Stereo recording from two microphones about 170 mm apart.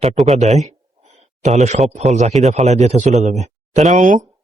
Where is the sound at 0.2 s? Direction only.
Centre (ahead or behind).